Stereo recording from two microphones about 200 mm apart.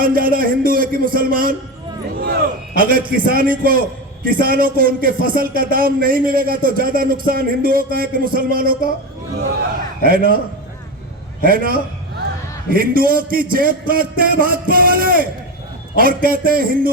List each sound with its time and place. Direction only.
0.0 s a man's voice: 45° right (ahead or behind)
10.0 s a man's voice: 45° right (ahead or behind)
11.4 s a man's voice: 45° right (ahead or behind)